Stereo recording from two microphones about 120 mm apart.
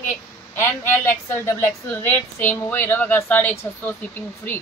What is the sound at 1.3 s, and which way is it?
A woman's voice, 20° left (ahead or behind).